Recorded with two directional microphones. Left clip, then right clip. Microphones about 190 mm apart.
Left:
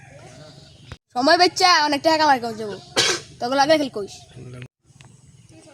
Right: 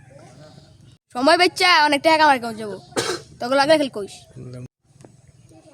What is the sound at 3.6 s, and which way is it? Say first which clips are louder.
Speech: right 1 dB; 5° right (ahead or behind).